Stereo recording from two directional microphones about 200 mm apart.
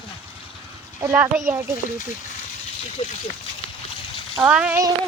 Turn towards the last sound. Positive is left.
turn(degrees=-5)  # may be behind; listen again after turning